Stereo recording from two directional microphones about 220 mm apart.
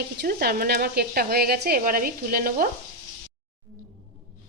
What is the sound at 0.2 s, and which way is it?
Speech, 45° right (ahead or behind).